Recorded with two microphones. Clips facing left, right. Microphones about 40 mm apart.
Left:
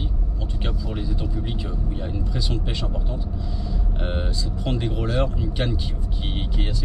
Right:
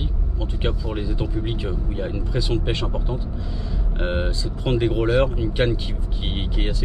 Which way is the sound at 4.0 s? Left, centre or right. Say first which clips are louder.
Right 5 dB; right.